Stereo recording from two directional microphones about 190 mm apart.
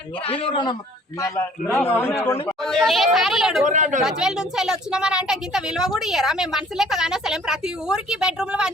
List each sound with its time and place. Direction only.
0.3 s speech: 25° left (ahead or behind)
1.2 s a man's voice: 15° left (ahead or behind)
2.6 s a woman's voice: centre (ahead or behind)
3.7 s speech: 40° right (ahead or behind)
4.0 s a woman's voice: centre (ahead or behind)